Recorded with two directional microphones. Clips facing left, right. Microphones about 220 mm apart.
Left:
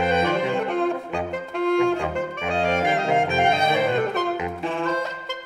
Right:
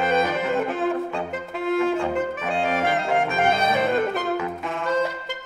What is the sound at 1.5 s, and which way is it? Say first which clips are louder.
Brass instrument: left 2 dB; centre (ahead or behind).